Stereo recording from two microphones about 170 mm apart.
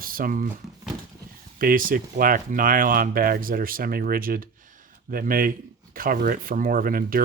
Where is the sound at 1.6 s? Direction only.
55° right (ahead or behind).